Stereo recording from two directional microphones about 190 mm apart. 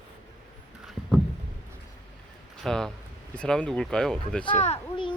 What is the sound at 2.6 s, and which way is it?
Speech, 5° left (ahead or behind).